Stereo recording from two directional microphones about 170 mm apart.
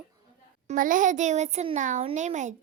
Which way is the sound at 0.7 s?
50° right (ahead or behind).